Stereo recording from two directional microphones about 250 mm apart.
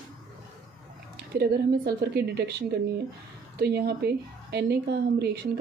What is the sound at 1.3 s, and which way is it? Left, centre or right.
A woman's voice, right.